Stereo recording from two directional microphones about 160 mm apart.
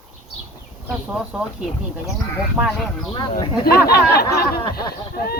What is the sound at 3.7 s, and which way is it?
Speech, 75° left (ahead or behind).